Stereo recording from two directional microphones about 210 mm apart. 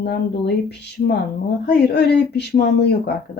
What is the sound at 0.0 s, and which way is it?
Speech, 50° left (ahead or behind).